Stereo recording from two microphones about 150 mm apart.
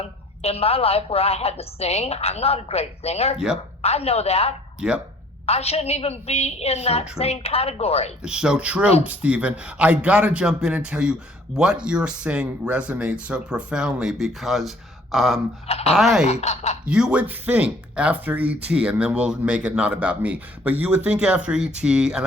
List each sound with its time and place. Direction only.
0.0 s a woman's voice: 45° left (ahead or behind)
3.3 s speech: 5° right (ahead or behind)
3.8 s a woman's voice: 45° left (ahead or behind)
8.2 s speech: 5° right (ahead or behind)
15.1 s a sound: centre (ahead or behind)
15.6 s a woman's voice: 45° left (ahead or behind)
16.0 s speech: centre (ahead or behind)
16.2 s a woman's voice: 45° left (ahead or behind)
16.8 s speech: 5° right (ahead or behind)